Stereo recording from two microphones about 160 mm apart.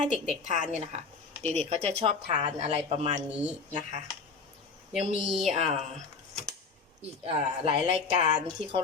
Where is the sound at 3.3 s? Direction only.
10° right (ahead or behind).